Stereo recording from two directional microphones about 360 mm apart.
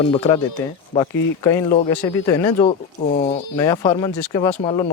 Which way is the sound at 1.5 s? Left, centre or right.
Centre.